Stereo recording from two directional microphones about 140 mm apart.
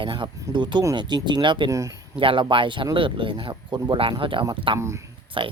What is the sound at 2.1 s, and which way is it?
Speech, 40° right (ahead or behind).